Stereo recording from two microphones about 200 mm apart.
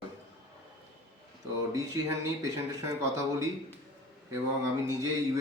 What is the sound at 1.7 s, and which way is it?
Speech, 15° right (ahead or behind).